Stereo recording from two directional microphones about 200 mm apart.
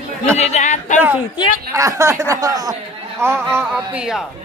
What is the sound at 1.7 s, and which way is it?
Speech, 15° right (ahead or behind).